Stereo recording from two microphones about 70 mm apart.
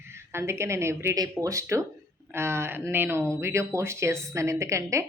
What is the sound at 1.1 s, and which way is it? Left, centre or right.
Speech, right.